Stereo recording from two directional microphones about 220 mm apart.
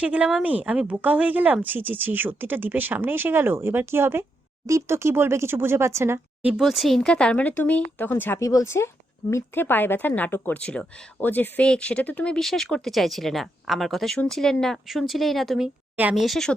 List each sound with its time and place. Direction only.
0.0 s a woman's voice: 5° right (ahead or behind)